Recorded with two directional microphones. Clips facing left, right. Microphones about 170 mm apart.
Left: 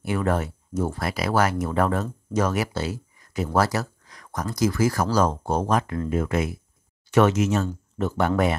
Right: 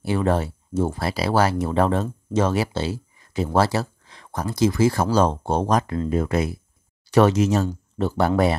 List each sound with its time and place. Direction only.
0.0 s speech: 30° right (ahead or behind)